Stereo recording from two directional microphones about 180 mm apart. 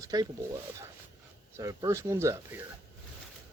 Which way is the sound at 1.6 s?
20° right (ahead or behind).